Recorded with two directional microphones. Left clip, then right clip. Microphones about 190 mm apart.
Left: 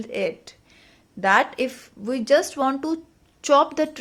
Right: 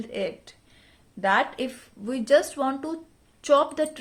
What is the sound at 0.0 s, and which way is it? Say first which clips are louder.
A woman's voice: left 4 dB; 25° left (ahead or behind).